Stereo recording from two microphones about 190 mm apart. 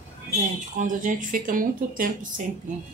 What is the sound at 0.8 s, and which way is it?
Speech, 45° right (ahead or behind).